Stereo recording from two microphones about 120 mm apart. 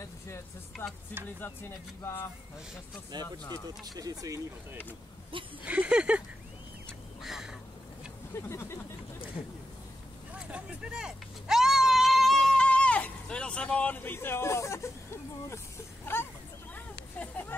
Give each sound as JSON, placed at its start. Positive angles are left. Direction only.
{"t": 0.7, "sound": "speech", "side_deg": 0}
{"t": 1.4, "sound": "speech", "side_deg": 20}
{"t": 3.1, "sound": "speech", "side_deg": -35}
{"t": 5.3, "sound": "speech", "side_deg": -45}
{"t": 5.7, "sound": "a sound", "side_deg": -10}
{"t": 7.2, "sound": "duck", "side_deg": -5}
{"t": 8.4, "sound": "speech", "side_deg": 20}
{"t": 10.5, "sound": "a sound", "side_deg": -10}
{"t": 16.1, "sound": "hubbub", "side_deg": 20}
{"t": 16.7, "sound": "a sound", "side_deg": 15}